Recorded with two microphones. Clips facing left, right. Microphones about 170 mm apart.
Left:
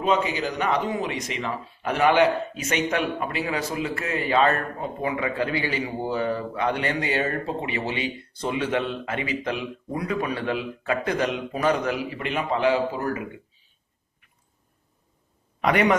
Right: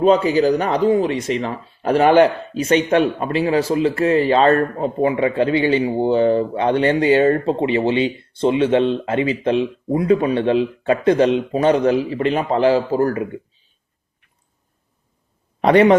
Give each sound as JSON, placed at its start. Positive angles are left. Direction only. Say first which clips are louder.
{"t": 0.0, "sound": "speech", "louder": "right 9 dB", "side_deg": -35}
{"t": 15.6, "sound": "speech", "louder": "right 9 dB", "side_deg": -30}